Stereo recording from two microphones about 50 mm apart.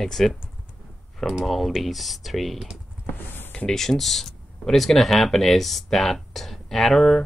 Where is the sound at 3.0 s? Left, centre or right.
Left.